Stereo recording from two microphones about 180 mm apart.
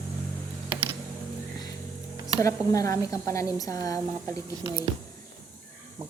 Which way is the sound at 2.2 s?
15° left (ahead or behind).